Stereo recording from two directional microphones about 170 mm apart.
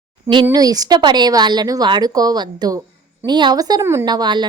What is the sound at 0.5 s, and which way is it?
A woman's voice, 20° right (ahead or behind).